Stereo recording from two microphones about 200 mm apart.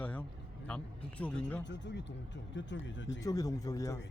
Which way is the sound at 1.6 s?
60° left (ahead or behind).